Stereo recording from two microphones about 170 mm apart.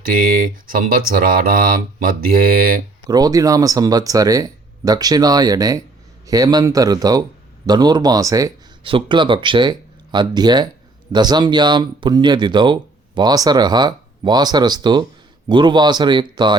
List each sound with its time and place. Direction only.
0.7 s mantra: 55° right (ahead or behind)
3.1 s speech: 20° right (ahead or behind)